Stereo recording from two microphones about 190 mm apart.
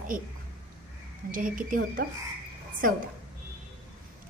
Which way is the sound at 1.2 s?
45° right (ahead or behind).